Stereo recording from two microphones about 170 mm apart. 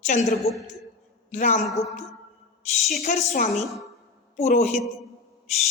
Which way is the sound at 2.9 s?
60° left (ahead or behind).